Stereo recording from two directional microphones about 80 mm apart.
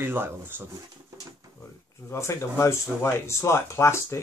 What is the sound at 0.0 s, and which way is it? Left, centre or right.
Speech, right.